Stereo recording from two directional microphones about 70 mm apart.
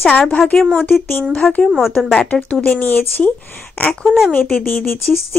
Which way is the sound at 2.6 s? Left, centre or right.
Left.